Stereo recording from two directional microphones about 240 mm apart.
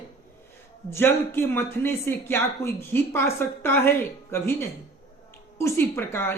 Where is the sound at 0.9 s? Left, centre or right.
Centre.